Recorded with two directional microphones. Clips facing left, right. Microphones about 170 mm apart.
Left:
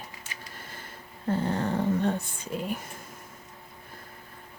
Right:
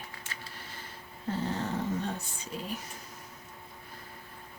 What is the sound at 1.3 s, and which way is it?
Dog, 55° left (ahead or behind).